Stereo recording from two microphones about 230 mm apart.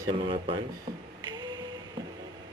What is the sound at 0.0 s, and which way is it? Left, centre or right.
Speech, right.